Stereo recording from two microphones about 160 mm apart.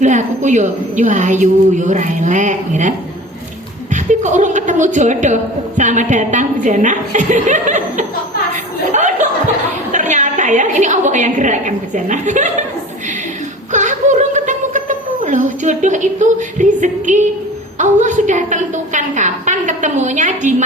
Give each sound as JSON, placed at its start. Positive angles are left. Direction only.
{"t": 0.0, "sound": "a woman's voice", "side_deg": -50}
{"t": 4.1, "sound": "a woman's voice", "side_deg": -50}
{"t": 8.9, "sound": "chuckle", "side_deg": -50}
{"t": 9.9, "sound": "a woman's voice", "side_deg": -50}
{"t": 13.7, "sound": "a woman's voice", "side_deg": -50}